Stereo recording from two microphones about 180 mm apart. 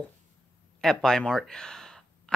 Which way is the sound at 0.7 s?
5° left (ahead or behind).